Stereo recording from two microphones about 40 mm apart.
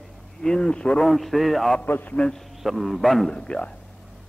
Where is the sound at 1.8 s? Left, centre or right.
Left.